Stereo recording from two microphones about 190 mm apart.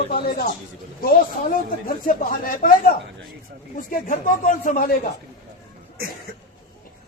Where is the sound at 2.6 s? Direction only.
50° left (ahead or behind).